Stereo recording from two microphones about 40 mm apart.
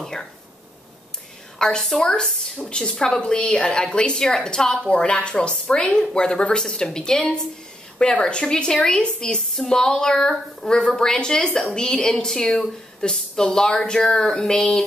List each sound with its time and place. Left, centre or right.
0.0 s a sound: centre
1.6 s speech: centre
2.2 s speech: centre
2.7 s a woman's voice: centre